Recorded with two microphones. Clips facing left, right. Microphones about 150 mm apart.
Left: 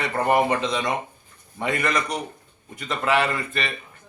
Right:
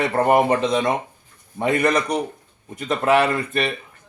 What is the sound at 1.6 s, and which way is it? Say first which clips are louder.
Speech: right 6 dB; 50° right (ahead or behind).